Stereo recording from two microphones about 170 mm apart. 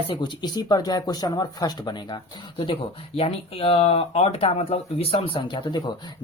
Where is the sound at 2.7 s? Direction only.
35° left (ahead or behind).